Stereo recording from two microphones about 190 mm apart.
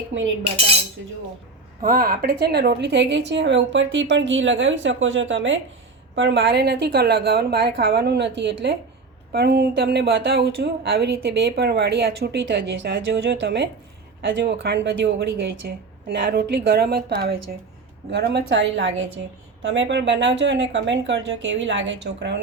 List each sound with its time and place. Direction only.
0.4 s cutlery: 30° right (ahead or behind)
1.8 s a woman's voice: 50° right (ahead or behind); by 5.5 s 80° right
6.1 s speech: 65° right (ahead or behind)
18.1 s a woman's voice: 65° right (ahead or behind)